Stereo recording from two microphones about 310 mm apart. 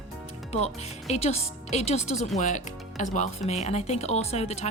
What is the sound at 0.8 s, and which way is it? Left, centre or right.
Speech, centre.